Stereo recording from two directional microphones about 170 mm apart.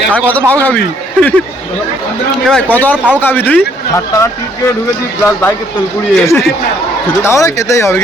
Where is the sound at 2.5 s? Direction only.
10° left (ahead or behind).